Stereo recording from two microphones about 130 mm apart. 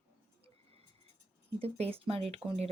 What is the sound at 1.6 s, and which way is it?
A woman's voice, 50° right (ahead or behind).